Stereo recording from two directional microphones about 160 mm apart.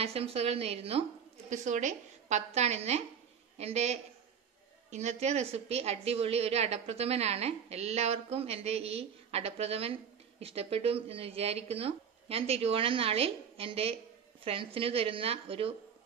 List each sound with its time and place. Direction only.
0.0 s a woman's voice: 40° right (ahead or behind)
1.5 s a woman's voice: 50° right (ahead or behind)